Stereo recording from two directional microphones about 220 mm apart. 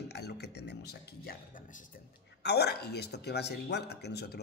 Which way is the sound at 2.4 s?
50° left (ahead or behind).